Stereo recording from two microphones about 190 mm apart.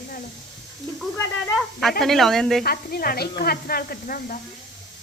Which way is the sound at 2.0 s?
Centre (ahead or behind).